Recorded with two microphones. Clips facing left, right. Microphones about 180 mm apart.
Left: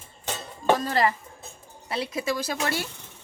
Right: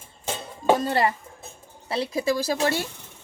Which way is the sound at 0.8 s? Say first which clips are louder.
Right 1 dB; 25° right (ahead or behind).